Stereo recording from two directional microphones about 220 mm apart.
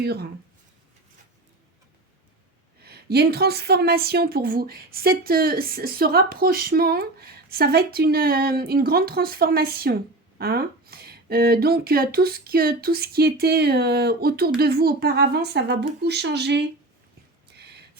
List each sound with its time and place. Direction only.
0.0 s a woman's voice: 45° right (ahead or behind)
2.8 s a woman's voice: 45° right (ahead or behind)
17.5 s a sound: 50° right (ahead or behind)